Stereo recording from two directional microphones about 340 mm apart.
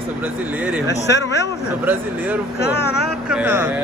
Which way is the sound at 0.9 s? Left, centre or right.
Left.